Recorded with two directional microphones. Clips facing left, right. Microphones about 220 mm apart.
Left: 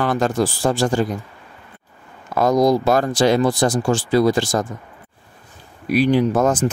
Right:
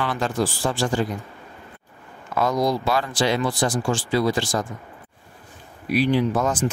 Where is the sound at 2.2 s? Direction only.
40° left (ahead or behind).